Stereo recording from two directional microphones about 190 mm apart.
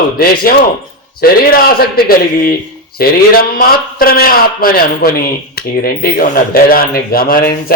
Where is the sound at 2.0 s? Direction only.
50° left (ahead or behind).